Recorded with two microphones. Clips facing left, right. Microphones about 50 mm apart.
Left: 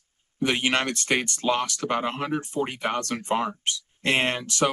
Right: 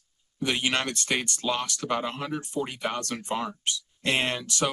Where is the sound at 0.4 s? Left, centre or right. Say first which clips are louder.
Left 3 dB; left.